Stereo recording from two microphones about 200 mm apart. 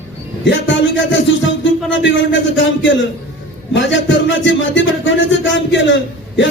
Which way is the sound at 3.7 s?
65° left (ahead or behind).